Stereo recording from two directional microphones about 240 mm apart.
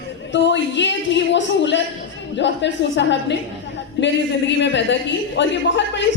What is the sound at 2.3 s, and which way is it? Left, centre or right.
Speech, left.